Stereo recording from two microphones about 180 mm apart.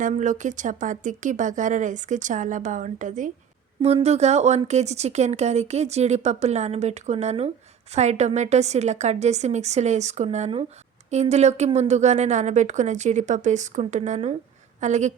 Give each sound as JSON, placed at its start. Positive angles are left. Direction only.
{"t": 0.0, "sound": "speech", "side_deg": -45}
{"t": 3.8, "sound": "speech", "side_deg": -35}